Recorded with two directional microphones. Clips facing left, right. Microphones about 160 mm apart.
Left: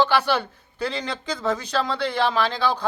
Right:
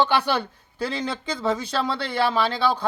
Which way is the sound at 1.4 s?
10° right (ahead or behind).